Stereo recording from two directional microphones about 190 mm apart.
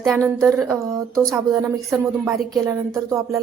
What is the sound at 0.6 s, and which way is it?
Speech, 15° right (ahead or behind).